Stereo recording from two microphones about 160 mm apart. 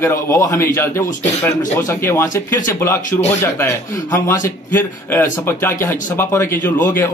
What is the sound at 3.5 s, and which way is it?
Speech, 15° left (ahead or behind).